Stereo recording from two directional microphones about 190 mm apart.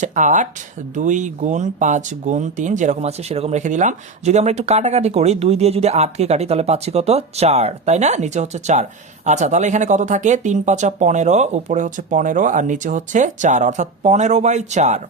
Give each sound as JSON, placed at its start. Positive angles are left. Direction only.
{"t": 0.0, "sound": "speech", "side_deg": -40}